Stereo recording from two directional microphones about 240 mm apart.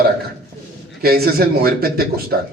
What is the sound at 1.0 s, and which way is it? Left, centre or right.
A man's voice, right.